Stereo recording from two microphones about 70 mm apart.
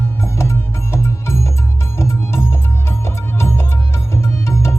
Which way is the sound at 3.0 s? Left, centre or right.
Left.